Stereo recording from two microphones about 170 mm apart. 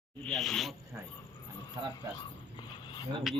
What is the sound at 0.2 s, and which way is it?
Speech, 5° left (ahead or behind).